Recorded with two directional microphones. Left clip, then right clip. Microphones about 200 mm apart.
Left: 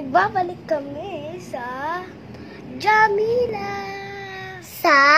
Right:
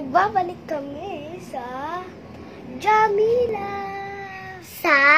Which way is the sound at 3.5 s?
Centre (ahead or behind).